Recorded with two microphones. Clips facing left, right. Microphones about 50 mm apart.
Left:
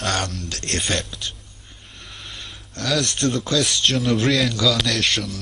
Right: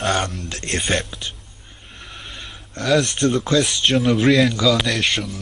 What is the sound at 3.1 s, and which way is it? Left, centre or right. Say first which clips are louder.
Speech: right 3 dB; right.